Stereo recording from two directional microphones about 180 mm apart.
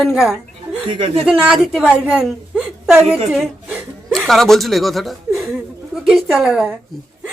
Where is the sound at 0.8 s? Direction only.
25° right (ahead or behind).